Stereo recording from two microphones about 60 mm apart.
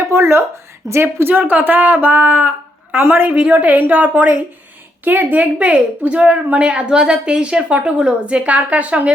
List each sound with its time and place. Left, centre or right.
0.1 s speech: right
1.3 s speech: right
3.3 s a woman's voice: right